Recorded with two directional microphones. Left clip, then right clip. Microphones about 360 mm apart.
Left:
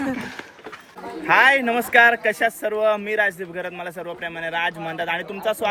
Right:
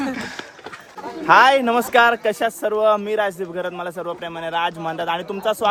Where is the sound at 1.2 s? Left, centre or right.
Centre.